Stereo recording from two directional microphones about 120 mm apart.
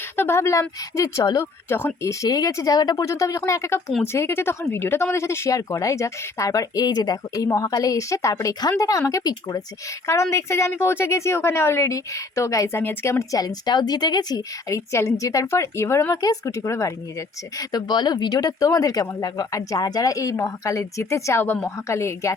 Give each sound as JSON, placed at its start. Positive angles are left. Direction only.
{"t": 0.2, "sound": "a woman's voice", "side_deg": 20}